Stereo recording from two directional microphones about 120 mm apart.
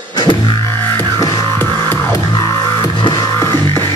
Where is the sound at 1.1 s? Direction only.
40° right (ahead or behind).